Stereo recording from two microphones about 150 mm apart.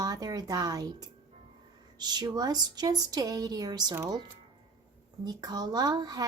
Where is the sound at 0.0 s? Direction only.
25° right (ahead or behind).